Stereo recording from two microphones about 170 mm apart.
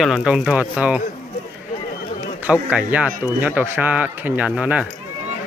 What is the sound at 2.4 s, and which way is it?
Speech, 10° right (ahead or behind).